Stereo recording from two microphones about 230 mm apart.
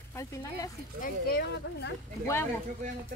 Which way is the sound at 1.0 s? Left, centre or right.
Left.